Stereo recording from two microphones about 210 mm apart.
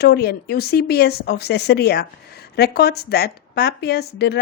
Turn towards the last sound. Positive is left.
turn(degrees=50)  # may be behind; listen again after turning